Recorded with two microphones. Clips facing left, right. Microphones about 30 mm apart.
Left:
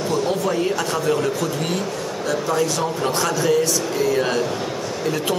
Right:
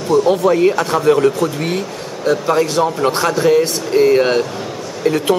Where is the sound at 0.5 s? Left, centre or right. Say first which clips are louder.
Right 8 dB; right.